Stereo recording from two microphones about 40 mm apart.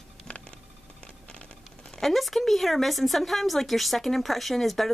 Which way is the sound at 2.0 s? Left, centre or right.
Centre.